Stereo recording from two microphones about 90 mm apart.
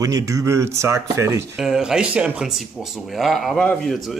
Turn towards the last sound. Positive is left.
turn(degrees=10)  # may be behind; listen again after turning